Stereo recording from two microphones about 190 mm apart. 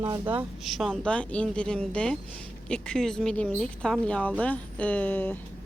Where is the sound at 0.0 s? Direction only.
10° right (ahead or behind).